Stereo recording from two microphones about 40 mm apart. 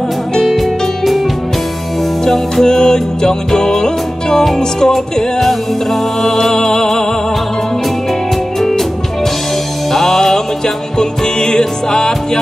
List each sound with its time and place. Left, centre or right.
0.4 s music: centre
2.2 s music: centre
8.5 s music: centre